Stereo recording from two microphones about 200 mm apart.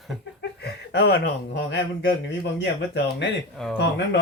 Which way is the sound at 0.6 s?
55° left (ahead or behind).